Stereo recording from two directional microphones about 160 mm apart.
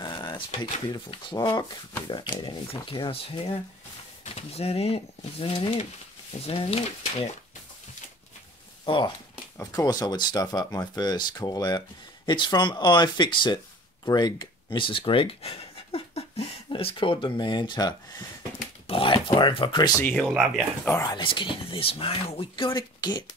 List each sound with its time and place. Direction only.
0.0 s a sound: 25° left (ahead or behind)
0.9 s speech: 25° left (ahead or behind)
8.8 s speech: 30° left (ahead or behind)
20.0 s speech: 5° left (ahead or behind)
20.9 s speech: 25° left (ahead or behind)